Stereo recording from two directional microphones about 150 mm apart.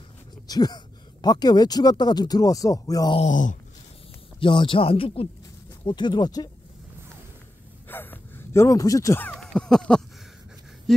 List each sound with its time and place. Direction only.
0.5 s speech: 25° left (ahead or behind)
3.2 s speech: 60° left (ahead or behind)
4.4 s speech: 35° left (ahead or behind)
7.9 s speech: 15° left (ahead or behind)